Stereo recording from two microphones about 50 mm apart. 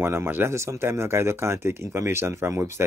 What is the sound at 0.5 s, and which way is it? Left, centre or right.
Speech, right.